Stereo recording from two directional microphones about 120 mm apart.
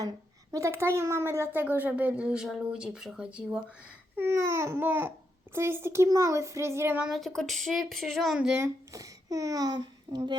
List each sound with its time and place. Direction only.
0.5 s speech: 25° right (ahead or behind); by 3.6 s 10° right (ahead or behind)
4.2 s a child's voice: 20° right (ahead or behind)
7.0 s speech: centre (ahead or behind)
8.4 s speech: 10° right (ahead or behind)
8.9 s a child's voice: 30° right (ahead or behind)